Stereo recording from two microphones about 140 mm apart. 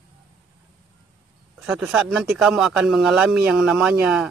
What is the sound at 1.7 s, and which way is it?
Speech, 5° right (ahead or behind).